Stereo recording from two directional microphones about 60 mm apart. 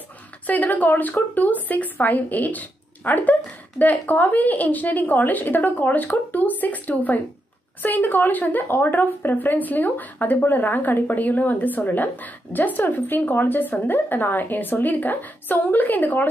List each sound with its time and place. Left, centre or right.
0.5 s speech: left